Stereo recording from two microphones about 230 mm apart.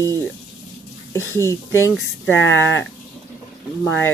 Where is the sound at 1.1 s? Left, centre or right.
Centre.